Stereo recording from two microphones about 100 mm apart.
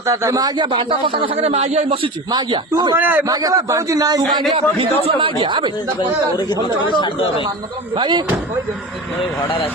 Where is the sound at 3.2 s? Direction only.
35° right (ahead or behind).